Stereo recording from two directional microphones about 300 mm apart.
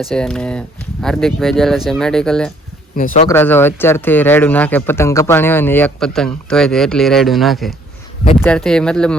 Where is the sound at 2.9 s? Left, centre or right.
Left.